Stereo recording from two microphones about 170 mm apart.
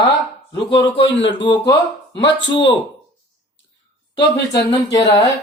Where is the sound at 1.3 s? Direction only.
25° left (ahead or behind).